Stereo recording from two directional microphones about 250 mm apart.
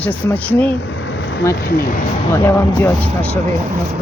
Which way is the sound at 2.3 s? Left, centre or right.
Centre.